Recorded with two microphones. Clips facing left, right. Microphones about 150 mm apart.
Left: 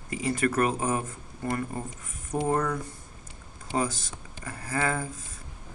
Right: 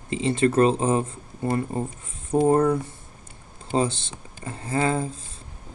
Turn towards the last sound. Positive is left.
turn(degrees=-25)  # may be behind; listen again after turning